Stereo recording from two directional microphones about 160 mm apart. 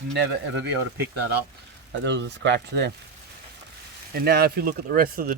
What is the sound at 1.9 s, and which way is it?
Speech, 90° right.